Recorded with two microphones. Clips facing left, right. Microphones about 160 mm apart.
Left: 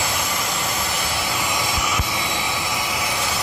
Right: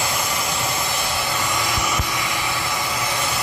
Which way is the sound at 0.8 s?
Centre (ahead or behind).